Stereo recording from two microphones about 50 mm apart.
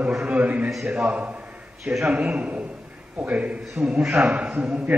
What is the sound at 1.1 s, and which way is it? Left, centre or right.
A man's voice, right.